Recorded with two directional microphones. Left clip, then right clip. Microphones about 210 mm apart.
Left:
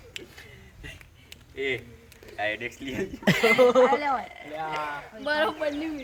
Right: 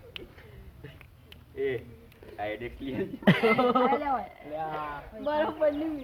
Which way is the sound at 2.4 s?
25° left (ahead or behind).